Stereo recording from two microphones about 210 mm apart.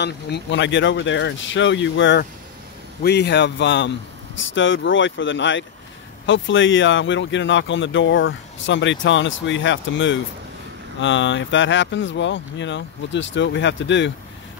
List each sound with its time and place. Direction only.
0.0 s speech: 55° left (ahead or behind)